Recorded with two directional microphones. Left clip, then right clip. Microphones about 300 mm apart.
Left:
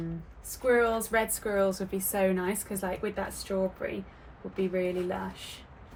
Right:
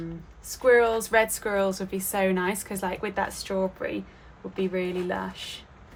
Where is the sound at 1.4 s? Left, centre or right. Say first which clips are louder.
Right 2 dB; centre.